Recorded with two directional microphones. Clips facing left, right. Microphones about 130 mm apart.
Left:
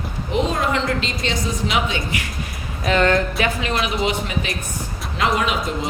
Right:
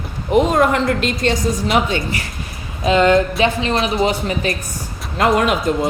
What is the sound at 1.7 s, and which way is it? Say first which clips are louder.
Speech: right 4 dB; 40° right (ahead or behind).